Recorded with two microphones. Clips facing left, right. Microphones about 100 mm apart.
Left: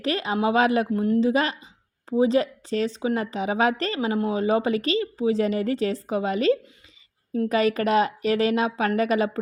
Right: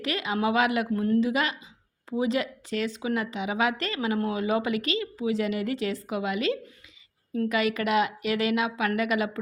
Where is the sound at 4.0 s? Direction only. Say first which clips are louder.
Left 3 dB; 25° left (ahead or behind).